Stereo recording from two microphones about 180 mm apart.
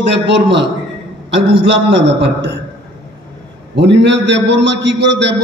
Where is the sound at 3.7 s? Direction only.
75° right (ahead or behind).